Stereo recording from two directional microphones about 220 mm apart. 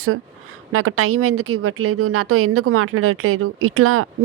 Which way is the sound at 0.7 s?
80° right.